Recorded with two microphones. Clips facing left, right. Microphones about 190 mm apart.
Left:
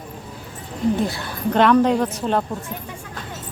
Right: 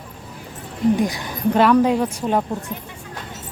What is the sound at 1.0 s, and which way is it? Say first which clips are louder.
A woman's voice: right 2 dB; 15° right (ahead or behind).